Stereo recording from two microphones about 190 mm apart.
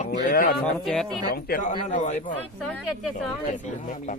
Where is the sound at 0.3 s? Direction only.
45° left (ahead or behind).